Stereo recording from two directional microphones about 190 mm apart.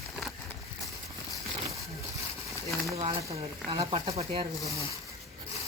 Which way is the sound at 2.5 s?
Centre (ahead or behind).